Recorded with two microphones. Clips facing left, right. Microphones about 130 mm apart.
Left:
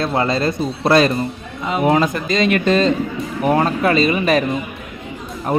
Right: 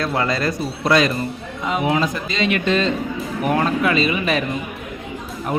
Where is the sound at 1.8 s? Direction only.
45° left (ahead or behind).